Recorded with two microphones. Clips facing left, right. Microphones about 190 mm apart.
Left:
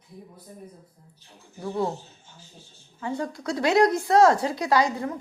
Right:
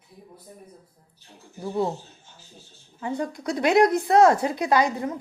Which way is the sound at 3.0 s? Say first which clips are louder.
Right 1 dB; 20° right (ahead or behind).